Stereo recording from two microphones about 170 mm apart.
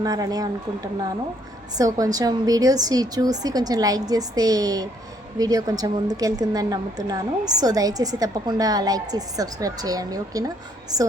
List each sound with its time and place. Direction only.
0.0 s a woman's voice: 20° right (ahead or behind)
1.8 s a woman's voice: 20° right (ahead or behind)